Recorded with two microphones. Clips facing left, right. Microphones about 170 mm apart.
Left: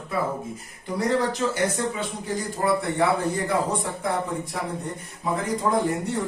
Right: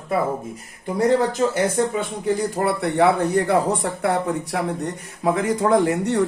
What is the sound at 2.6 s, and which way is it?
A man's voice, 65° right (ahead or behind).